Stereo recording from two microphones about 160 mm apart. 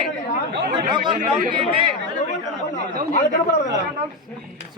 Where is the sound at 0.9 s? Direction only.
30° right (ahead or behind).